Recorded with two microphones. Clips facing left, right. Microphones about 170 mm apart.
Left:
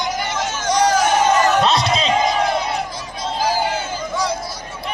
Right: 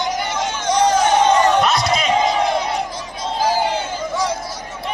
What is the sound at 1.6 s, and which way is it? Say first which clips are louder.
Speech: even; 30° left (ahead or behind).